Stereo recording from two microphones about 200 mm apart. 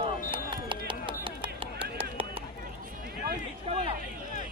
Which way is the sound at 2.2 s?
25° right (ahead or behind).